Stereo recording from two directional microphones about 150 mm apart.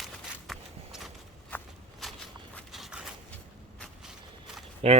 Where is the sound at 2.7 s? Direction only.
5° right (ahead or behind).